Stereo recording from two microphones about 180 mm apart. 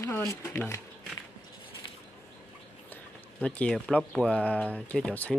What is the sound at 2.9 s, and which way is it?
Speech, 10° left (ahead or behind).